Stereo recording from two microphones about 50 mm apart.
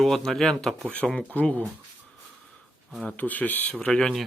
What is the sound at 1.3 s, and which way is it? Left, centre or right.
Speech, left.